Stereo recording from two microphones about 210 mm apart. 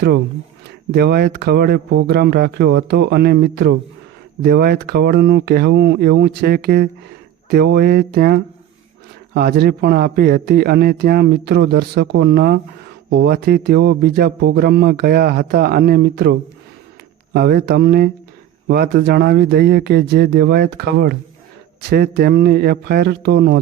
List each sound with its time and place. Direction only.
0.9 s a man's voice: 50° right (ahead or behind)
17.3 s a man's voice: 50° right (ahead or behind)